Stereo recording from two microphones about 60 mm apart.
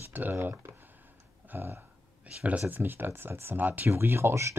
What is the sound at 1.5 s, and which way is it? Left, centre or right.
Speech, right.